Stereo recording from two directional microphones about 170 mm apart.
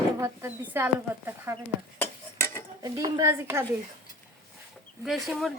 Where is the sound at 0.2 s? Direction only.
10° right (ahead or behind).